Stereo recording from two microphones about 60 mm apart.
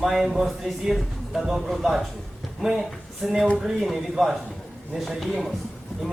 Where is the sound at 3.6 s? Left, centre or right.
Centre.